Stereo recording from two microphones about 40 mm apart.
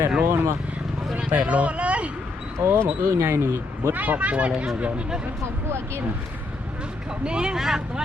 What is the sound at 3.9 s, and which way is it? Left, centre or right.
Speech, right.